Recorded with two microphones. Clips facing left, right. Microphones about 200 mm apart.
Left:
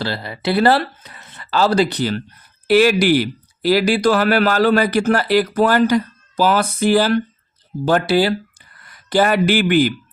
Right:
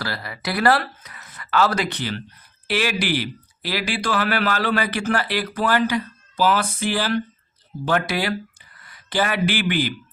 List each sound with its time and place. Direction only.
0.0 s speech: 25° left (ahead or behind)
9.0 s speech: 45° left (ahead or behind)